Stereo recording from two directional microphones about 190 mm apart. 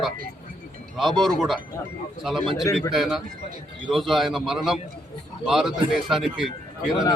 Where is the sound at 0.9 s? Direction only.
Centre (ahead or behind).